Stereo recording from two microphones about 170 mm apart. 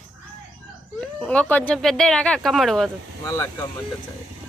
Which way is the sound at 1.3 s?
10° left (ahead or behind).